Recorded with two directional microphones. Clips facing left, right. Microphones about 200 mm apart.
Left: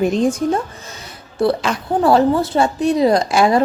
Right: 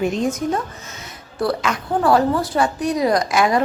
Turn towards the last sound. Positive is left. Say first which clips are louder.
# left 3 dB
turn(degrees=30)  # may be behind; listen again after turning